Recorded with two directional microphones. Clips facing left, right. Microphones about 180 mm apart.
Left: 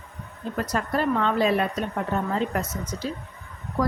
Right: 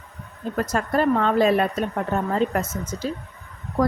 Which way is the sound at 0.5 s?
45° right (ahead or behind).